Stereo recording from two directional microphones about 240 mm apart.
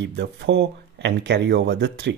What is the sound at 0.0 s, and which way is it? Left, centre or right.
Speech, right.